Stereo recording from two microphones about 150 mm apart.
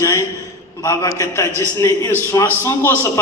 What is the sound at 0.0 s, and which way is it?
A man's voice, 20° left (ahead or behind).